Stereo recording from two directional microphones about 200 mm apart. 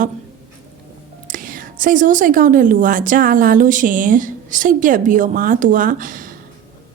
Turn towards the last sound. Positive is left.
turn(degrees=-40)  # may be behind; listen again after turning